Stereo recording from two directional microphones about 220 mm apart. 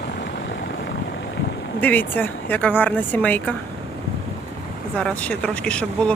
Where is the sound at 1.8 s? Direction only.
10° left (ahead or behind).